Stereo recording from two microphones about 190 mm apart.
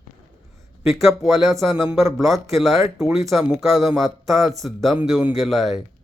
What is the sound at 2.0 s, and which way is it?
Speech, 15° right (ahead or behind).